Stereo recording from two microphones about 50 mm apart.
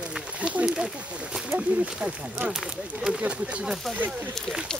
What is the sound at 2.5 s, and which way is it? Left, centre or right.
Speech, centre.